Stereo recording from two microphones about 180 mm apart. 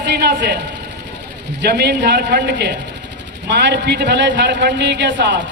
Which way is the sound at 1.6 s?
70° right (ahead or behind).